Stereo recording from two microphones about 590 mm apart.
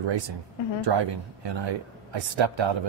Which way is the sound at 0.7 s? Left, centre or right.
Right.